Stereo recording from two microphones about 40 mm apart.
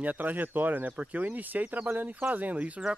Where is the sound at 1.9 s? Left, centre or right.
Right.